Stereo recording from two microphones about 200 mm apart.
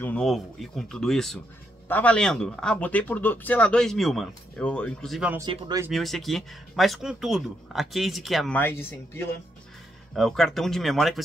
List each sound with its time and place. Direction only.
0.0 s speech: 5° left (ahead or behind)
5.4 s speech: 20° right (ahead or behind)
5.9 s speech: centre (ahead or behind)